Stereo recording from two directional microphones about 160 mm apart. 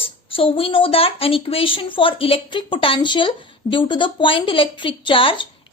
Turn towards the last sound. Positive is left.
turn(degrees=35)  # may be behind; listen again after turning